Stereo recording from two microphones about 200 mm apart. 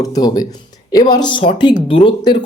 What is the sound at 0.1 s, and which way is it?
Speech, 20° left (ahead or behind).